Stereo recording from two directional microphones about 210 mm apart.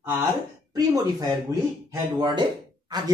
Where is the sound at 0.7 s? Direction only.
15° right (ahead or behind).